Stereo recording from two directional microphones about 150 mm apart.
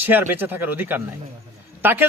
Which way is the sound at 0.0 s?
15° right (ahead or behind).